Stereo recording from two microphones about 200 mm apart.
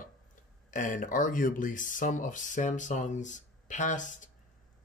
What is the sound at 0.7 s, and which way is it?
Speech, 40° left (ahead or behind).